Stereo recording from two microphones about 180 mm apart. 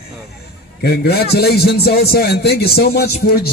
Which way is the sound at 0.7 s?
60° left (ahead or behind).